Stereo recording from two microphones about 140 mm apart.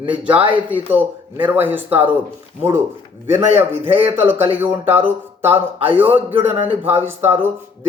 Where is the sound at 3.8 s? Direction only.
40° right (ahead or behind).